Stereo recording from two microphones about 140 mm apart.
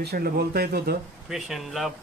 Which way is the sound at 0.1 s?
90° right.